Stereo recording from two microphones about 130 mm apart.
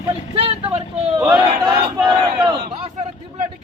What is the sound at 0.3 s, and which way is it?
Speech, 45° right (ahead or behind).